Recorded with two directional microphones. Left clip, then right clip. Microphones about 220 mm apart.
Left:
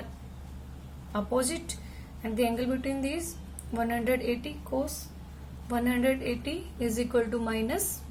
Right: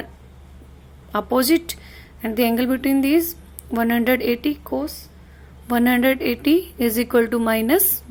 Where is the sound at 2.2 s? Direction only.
45° right (ahead or behind).